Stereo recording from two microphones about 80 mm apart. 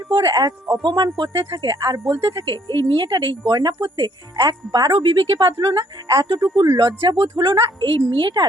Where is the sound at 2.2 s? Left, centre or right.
Right.